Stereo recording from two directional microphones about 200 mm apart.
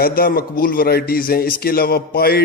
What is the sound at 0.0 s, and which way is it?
A man's voice, 50° left (ahead or behind).